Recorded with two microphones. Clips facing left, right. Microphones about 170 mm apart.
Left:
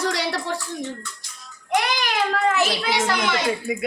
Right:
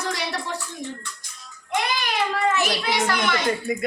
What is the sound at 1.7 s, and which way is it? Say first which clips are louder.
Child singing: left 3 dB; 90° left.